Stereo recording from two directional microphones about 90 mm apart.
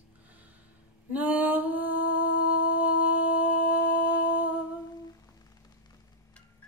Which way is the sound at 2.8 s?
20° right (ahead or behind).